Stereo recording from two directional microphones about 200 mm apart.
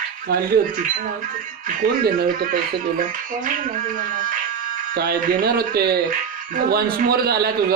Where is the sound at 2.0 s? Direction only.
50° right (ahead or behind).